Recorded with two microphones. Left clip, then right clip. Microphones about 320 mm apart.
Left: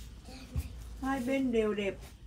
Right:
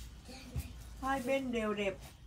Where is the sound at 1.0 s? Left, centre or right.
Centre.